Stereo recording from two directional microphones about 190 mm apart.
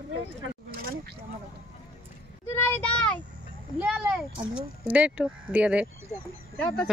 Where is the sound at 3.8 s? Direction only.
5° right (ahead or behind).